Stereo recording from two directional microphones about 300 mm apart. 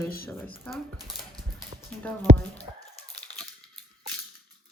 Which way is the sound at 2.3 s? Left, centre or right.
Right.